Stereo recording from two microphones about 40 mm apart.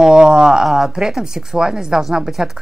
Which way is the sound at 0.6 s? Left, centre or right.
Centre.